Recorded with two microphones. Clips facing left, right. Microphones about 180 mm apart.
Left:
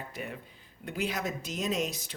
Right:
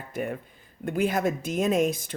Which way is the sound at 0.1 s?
50° right (ahead or behind).